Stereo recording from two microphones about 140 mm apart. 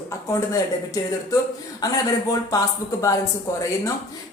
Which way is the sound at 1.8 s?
25° left (ahead or behind).